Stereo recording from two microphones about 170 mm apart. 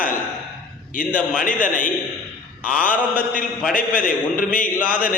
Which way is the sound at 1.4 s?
50° left (ahead or behind).